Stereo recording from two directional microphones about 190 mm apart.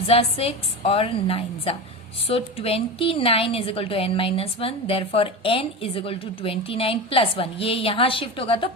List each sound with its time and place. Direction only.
0.1 s a woman's voice: 30° left (ahead or behind)